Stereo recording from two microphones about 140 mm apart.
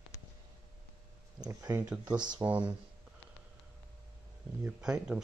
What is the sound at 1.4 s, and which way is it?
Speech, 25° right (ahead or behind).